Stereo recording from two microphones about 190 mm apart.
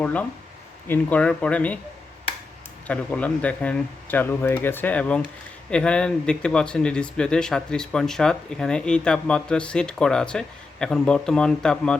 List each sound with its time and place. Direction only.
0.0 s speech: 5° left (ahead or behind)
2.8 s speech: 5° left (ahead or behind)